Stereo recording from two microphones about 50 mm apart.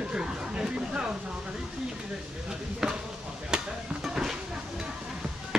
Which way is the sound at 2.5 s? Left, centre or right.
Centre.